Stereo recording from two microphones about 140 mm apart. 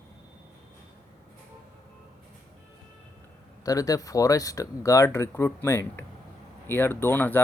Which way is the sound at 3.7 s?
25° left (ahead or behind).